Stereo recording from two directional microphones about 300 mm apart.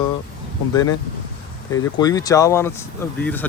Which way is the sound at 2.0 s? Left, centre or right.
Centre.